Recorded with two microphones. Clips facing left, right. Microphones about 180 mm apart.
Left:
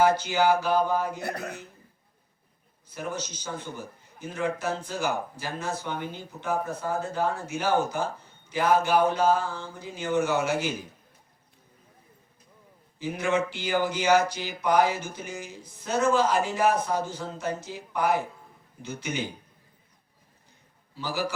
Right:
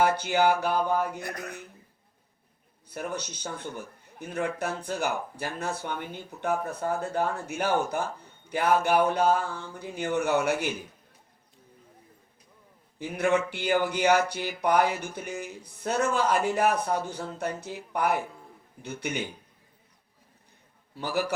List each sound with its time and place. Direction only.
0.0 s speech: 60° right (ahead or behind)
1.2 s a man's voice: 35° left (ahead or behind)
2.9 s speech: 60° right (ahead or behind)
13.0 s speech: 60° right (ahead or behind)
20.9 s speech: 60° right (ahead or behind)